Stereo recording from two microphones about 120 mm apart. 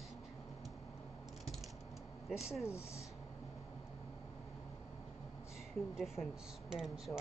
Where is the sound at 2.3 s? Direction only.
Centre (ahead or behind).